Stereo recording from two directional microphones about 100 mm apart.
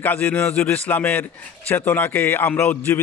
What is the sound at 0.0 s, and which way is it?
A man's voice, 15° left (ahead or behind).